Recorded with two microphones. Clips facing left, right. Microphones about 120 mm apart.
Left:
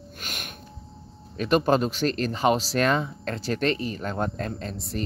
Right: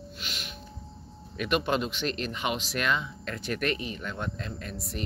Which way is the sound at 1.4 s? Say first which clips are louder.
Left 6 dB; 40° left (ahead or behind).